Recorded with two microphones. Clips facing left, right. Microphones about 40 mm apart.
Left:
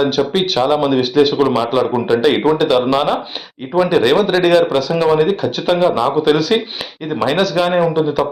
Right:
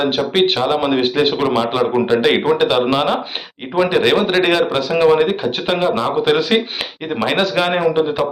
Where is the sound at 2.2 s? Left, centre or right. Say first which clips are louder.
Left 1 dB; right.